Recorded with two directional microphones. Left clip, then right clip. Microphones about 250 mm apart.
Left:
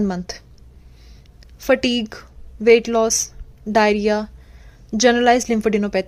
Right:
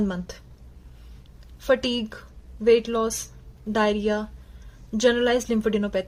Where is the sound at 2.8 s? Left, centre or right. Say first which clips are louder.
Left 7 dB; left.